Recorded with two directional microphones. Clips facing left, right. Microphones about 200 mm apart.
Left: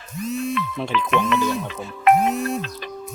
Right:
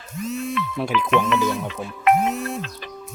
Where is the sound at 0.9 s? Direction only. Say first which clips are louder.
Even; 40° left (ahead or behind).